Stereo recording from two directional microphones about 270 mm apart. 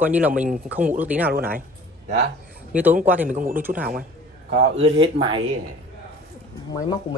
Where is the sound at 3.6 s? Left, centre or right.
Centre.